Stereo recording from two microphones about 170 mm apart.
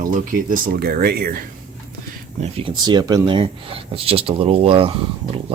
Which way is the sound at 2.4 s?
35° right (ahead or behind).